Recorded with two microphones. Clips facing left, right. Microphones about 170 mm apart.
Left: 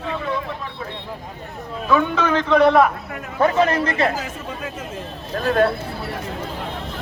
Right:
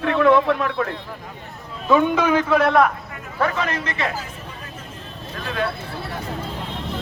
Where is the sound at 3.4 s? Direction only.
30° left (ahead or behind).